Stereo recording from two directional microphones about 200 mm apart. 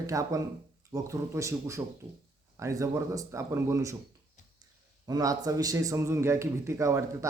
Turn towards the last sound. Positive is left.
turn(degrees=-15)  # may be behind; listen again after turning